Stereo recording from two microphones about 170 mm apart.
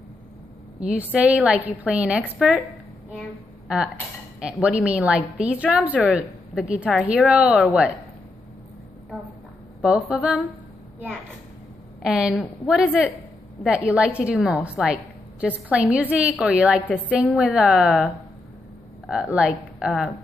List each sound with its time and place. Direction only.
0.7 s a woman's voice: 5° right (ahead or behind)
3.6 s a woman's voice: 5° right (ahead or behind)
9.8 s a woman's voice: 5° right (ahead or behind)
12.0 s a woman's voice: 5° right (ahead or behind)
19.3 s a woman's voice: 5° right (ahead or behind)